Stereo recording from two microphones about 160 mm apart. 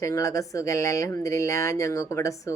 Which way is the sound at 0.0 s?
20° left (ahead or behind).